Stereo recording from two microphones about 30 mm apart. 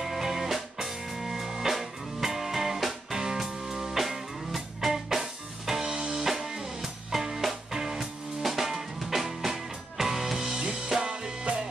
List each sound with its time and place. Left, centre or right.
0.0 s music: centre
5.9 s music: right
6.2 s music: centre
11.1 s music: right